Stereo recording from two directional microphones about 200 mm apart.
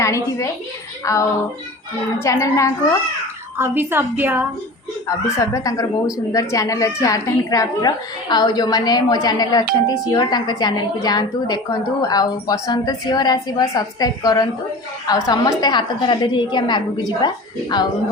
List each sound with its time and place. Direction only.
0.0 s a woman's voice: 15° left (ahead or behind)
3.6 s a woman's voice: 10° right (ahead or behind)
5.0 s a woman's voice: 15° left (ahead or behind)